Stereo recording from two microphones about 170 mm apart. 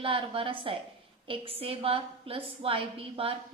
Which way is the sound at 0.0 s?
30° right (ahead or behind).